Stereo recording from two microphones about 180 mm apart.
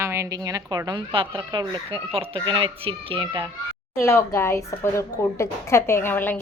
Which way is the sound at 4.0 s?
15° left (ahead or behind).